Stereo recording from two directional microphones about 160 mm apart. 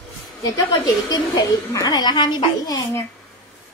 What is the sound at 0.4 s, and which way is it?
A woman's voice, 25° left (ahead or behind).